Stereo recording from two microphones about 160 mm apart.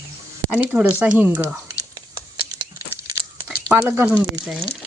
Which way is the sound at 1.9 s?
30° right (ahead or behind).